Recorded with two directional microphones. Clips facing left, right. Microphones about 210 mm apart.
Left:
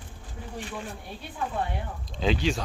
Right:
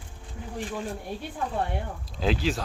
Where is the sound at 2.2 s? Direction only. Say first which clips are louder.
Even; centre (ahead or behind).